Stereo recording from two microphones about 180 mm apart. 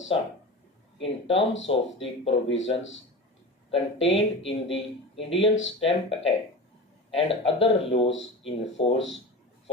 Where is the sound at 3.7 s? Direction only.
30° left (ahead or behind).